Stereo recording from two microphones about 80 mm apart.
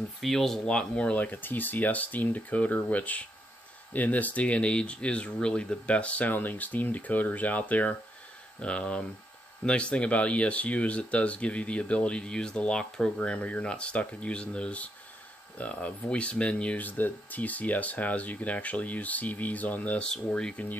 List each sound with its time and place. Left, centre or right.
0.2 s speech: centre